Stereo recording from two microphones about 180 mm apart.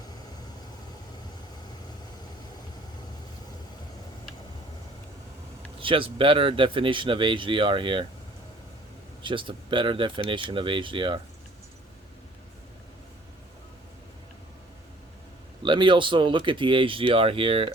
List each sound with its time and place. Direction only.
5.8 s speech: 30° right (ahead or behind)
9.2 s speech: 30° right (ahead or behind)
15.6 s speech: 25° right (ahead or behind)